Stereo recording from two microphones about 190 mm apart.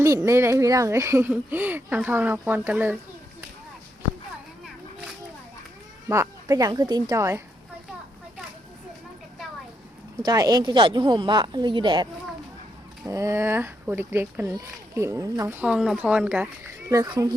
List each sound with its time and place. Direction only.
0.0 s speech: 15° right (ahead or behind)
4.6 s a sound: 5° right (ahead or behind)
6.1 s speech: 15° right (ahead or behind)
10.2 s speech: 20° right (ahead or behind)
13.1 s speech: 15° right (ahead or behind)
15.6 s speech: 5° right (ahead or behind)
16.9 s speech: 15° right (ahead or behind)